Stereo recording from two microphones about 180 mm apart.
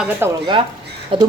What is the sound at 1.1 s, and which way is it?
Speech, 30° right (ahead or behind).